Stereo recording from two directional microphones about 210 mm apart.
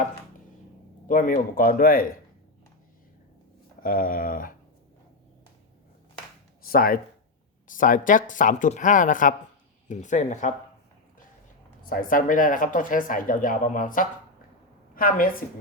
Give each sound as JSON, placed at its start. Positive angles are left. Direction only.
{"t": 1.0, "sound": "speech", "side_deg": 40}
{"t": 3.8, "sound": "speech", "side_deg": 40}
{"t": 6.7, "sound": "speech", "side_deg": 45}
{"t": 11.9, "sound": "a woman's voice", "side_deg": 40}